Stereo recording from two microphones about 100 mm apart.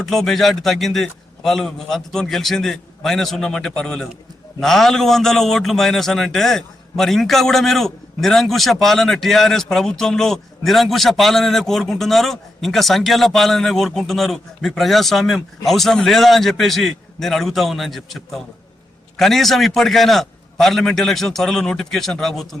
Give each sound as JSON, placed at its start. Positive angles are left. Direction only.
{"t": 0.0, "sound": "a man's voice", "side_deg": 5}